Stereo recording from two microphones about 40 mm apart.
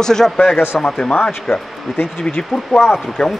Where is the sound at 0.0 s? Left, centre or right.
Centre.